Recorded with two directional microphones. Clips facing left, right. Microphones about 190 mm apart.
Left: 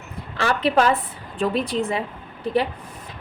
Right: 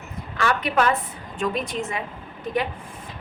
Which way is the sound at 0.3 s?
30° left (ahead or behind).